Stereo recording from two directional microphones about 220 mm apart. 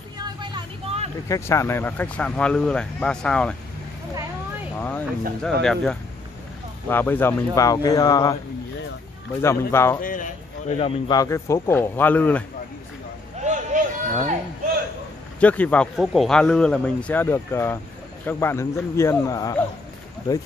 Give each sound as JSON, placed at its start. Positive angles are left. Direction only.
{"t": 0.2, "sound": "vehicle", "side_deg": -20}
{"t": 1.3, "sound": "a man's voice", "side_deg": 15}
{"t": 4.7, "sound": "a man's voice", "side_deg": 10}
{"t": 9.4, "sound": "a man's voice", "side_deg": 10}
{"t": 10.0, "sound": "a man's voice", "side_deg": 35}
{"t": 10.8, "sound": "a man's voice", "side_deg": 20}
{"t": 13.4, "sound": "a sound", "side_deg": -35}
{"t": 15.4, "sound": "a man's voice", "side_deg": 5}